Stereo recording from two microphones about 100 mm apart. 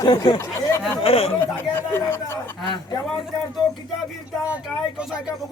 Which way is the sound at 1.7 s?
25° left (ahead or behind).